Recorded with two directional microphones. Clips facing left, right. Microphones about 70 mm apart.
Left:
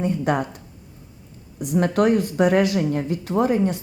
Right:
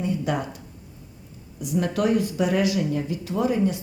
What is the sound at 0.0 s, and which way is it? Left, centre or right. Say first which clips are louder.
Speech: left 4 dB; left.